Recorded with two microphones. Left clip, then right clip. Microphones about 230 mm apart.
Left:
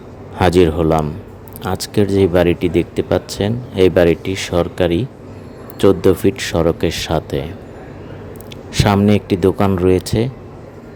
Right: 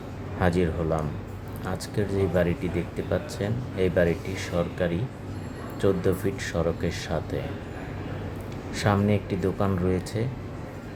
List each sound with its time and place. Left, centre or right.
0.3 s speech: left
8.7 s speech: left